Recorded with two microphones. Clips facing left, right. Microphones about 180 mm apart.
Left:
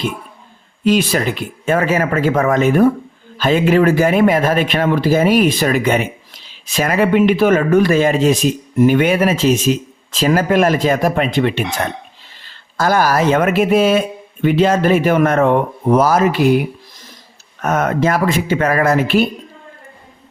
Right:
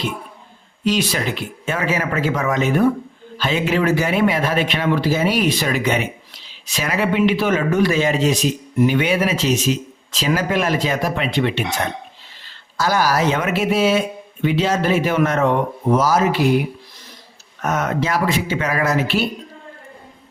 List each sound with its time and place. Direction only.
0.9 s speech: 50° left (ahead or behind)
12.7 s speech: 50° left (ahead or behind)
17.6 s speech: 55° left (ahead or behind)